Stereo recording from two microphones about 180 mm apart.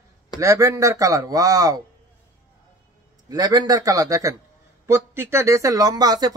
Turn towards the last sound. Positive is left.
turn(degrees=-20)  # may be behind; listen again after turning